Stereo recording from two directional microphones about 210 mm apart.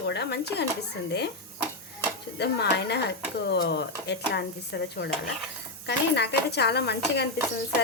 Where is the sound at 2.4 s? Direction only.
55° left (ahead or behind).